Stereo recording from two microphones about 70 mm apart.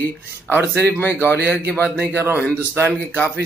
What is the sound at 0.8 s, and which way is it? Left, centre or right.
Speech, left.